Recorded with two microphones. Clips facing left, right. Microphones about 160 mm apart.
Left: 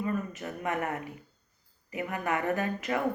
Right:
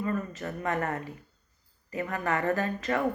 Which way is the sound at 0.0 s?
15° left (ahead or behind).